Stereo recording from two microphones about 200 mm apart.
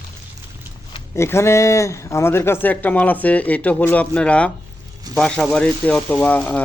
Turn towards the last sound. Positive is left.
turn(degrees=5)  # may be behind; listen again after turning